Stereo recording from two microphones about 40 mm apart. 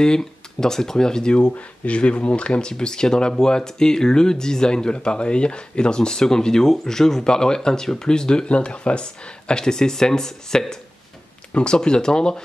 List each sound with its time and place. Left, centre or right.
0.0 s speech: centre